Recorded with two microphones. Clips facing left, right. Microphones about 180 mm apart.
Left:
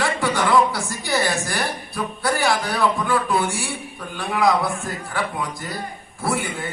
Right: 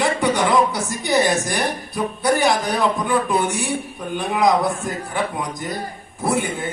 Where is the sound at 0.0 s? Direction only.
20° right (ahead or behind).